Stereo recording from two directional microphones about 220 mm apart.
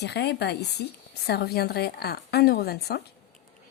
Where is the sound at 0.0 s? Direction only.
50° left (ahead or behind).